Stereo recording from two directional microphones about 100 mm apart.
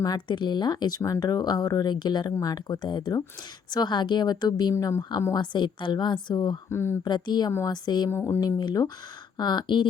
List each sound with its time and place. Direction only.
0.0 s speech: 45° left (ahead or behind)
4.7 s speech: 30° left (ahead or behind)
5.3 s speech: 50° left (ahead or behind)
6.7 s speech: 25° left (ahead or behind)
7.0 s speech: 45° left (ahead or behind)
8.1 s speech: 25° left (ahead or behind)
8.4 s speech: 40° left (ahead or behind)